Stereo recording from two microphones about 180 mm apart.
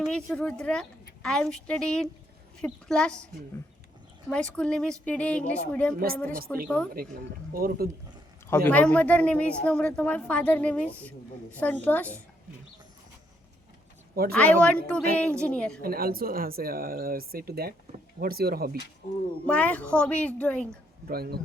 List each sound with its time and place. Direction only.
0.0 s a woman's voice: 5° left (ahead or behind)
4.3 s a woman's voice: 5° left (ahead or behind)
7.0 s speech: 55° right (ahead or behind)
8.4 s a woman's voice: 10° left (ahead or behind)
14.3 s a woman's voice: 10° left (ahead or behind)
15.8 s speech: 55° right (ahead or behind)
19.5 s a woman's voice: 10° left (ahead or behind)
21.1 s speech: 60° right (ahead or behind)